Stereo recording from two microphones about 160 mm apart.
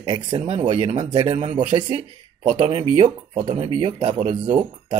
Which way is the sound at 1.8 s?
35° right (ahead or behind).